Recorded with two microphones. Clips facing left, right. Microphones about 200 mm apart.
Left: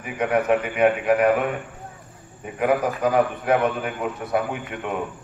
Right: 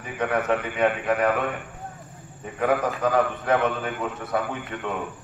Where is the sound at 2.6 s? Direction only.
15° left (ahead or behind).